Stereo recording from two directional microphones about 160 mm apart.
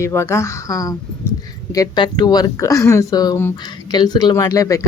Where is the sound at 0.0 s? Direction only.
15° left (ahead or behind).